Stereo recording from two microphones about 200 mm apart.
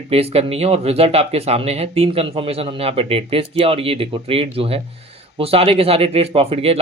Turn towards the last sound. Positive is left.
turn(degrees=-30)  # may be behind; listen again after turning